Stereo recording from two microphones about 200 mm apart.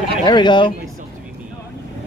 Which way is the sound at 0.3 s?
20° left (ahead or behind).